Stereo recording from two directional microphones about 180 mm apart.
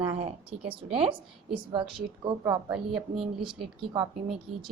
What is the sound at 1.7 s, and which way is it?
Speech, 30° right (ahead or behind).